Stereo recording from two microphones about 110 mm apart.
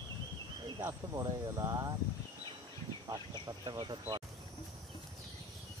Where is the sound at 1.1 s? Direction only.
30° right (ahead or behind).